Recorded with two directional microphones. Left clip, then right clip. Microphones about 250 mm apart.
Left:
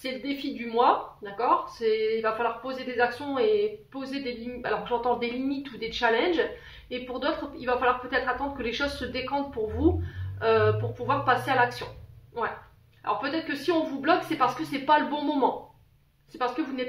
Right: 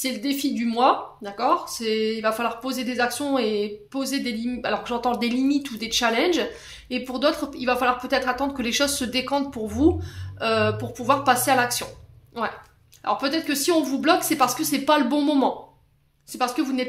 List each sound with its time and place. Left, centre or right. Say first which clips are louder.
0.0 s speech: right 6 dB; right
10.4 s speech: right 1 dB; right
13.0 s speech: right 5 dB; right